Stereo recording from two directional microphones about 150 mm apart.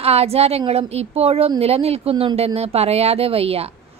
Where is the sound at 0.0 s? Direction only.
45° right (ahead or behind).